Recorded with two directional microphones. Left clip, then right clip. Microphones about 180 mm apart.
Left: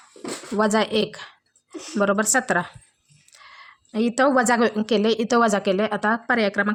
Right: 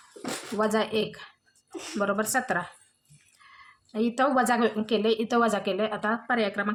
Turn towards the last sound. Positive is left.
turn(degrees=45)  # may be behind; listen again after turning